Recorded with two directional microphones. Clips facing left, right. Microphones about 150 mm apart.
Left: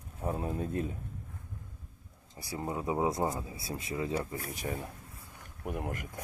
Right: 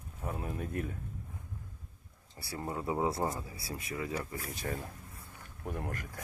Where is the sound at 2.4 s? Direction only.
15° left (ahead or behind).